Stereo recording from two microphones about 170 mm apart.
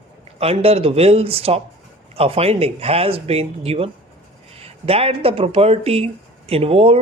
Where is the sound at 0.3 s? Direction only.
35° right (ahead or behind).